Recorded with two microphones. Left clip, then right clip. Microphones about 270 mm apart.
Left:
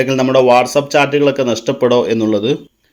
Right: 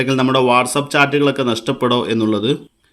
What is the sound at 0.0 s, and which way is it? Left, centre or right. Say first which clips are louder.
Speech: left 4 dB; right.